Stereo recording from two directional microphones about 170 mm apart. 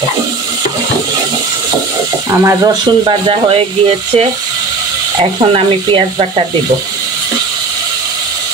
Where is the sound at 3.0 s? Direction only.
30° right (ahead or behind).